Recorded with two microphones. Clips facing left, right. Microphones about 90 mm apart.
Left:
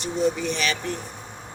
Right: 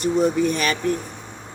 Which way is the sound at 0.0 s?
45° right (ahead or behind).